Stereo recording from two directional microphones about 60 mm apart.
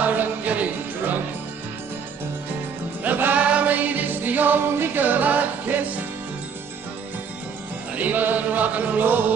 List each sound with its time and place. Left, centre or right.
0.0 s music: right
3.0 s music: right
7.9 s music: right